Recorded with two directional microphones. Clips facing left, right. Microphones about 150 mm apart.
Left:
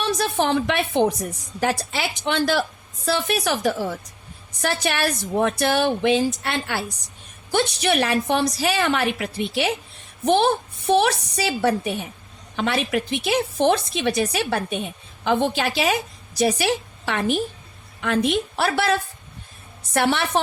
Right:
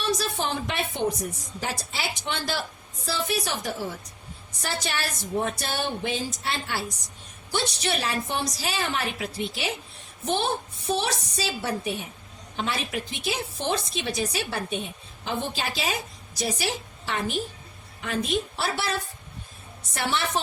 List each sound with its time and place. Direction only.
0.0 s a woman's voice: 65° left (ahead or behind)